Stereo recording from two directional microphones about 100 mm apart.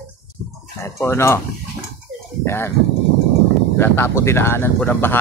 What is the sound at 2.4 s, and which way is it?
Speech, 25° left (ahead or behind).